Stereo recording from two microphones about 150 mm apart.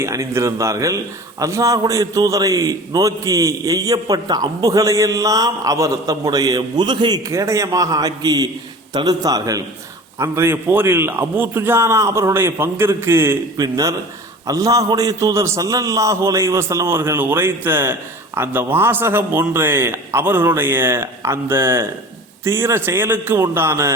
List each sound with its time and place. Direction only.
0.0 s a man's voice: 20° right (ahead or behind)